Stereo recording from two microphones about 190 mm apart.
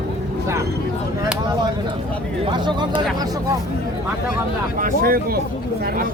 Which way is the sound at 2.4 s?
25° right (ahead or behind).